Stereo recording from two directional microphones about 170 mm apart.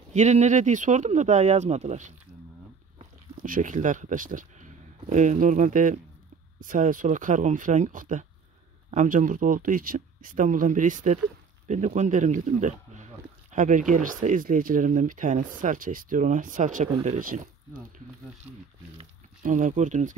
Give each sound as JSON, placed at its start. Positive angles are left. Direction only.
{"t": 0.1, "sound": "speech", "side_deg": -45}
{"t": 3.4, "sound": "speech", "side_deg": -50}
{"t": 19.4, "sound": "speech", "side_deg": -50}